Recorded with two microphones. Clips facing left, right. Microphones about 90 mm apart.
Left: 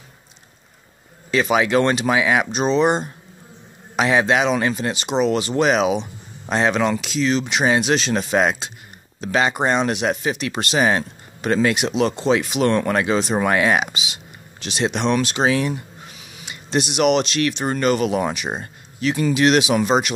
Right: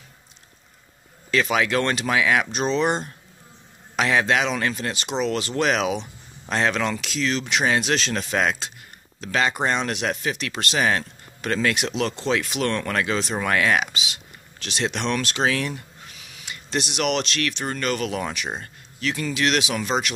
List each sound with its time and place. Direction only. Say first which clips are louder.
1.3 s speech: left 4 dB; 15° left (ahead or behind)